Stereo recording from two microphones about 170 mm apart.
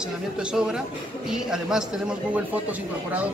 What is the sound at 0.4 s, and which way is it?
A man's voice, 5° right (ahead or behind).